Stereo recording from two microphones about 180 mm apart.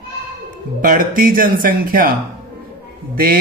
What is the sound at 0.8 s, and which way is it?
Speech, 50° right (ahead or behind).